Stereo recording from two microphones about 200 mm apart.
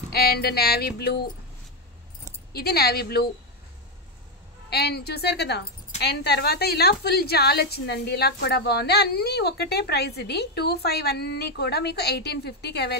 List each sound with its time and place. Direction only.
0.1 s a woman's voice: 50° left (ahead or behind)
2.5 s a woman's voice: 50° left (ahead or behind)
4.6 s a woman's voice: 55° left (ahead or behind)